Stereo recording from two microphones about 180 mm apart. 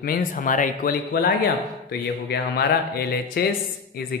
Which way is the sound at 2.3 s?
60° left (ahead or behind).